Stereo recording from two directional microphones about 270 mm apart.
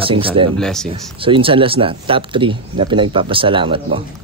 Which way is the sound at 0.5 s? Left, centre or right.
Centre.